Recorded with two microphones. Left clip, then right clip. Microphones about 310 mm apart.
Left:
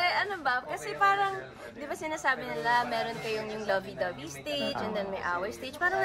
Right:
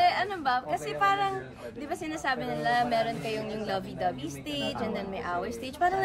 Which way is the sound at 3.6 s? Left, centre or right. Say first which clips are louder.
Left 1 dB; centre.